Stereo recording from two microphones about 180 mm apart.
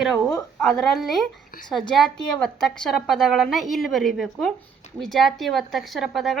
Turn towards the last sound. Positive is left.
turn(degrees=0)  # may be behind; listen again after turning